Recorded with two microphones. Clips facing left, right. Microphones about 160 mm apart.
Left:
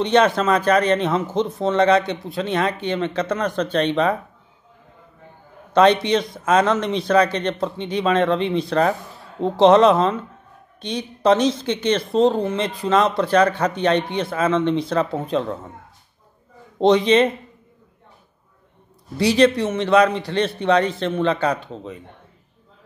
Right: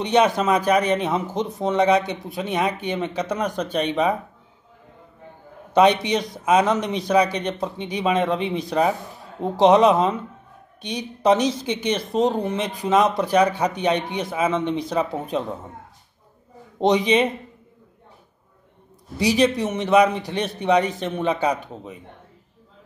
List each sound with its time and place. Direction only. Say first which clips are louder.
0.0 s speech: left 2 dB; 10° right (ahead or behind)
5.7 s speech: left 2 dB; 10° right (ahead or behind)
16.8 s speech: left 3 dB; 15° right (ahead or behind)
19.1 s speech: left 3 dB; 10° right (ahead or behind)